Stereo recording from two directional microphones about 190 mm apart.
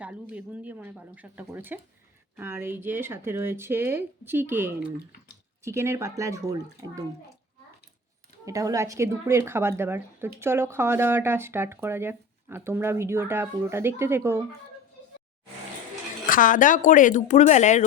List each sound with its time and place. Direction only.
0.0 s speech: 5° right (ahead or behind)
8.4 s speech: 15° right (ahead or behind)
16.2 s speech: 45° left (ahead or behind)